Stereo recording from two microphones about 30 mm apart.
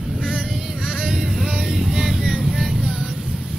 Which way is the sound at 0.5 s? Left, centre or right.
Right.